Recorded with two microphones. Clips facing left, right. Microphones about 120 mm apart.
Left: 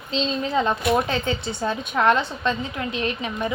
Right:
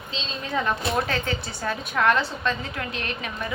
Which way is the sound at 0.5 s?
20° left (ahead or behind).